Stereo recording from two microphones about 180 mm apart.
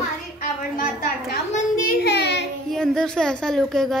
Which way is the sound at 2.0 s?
65° left (ahead or behind).